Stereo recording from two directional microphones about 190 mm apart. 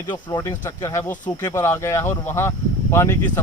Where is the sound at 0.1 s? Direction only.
20° left (ahead or behind).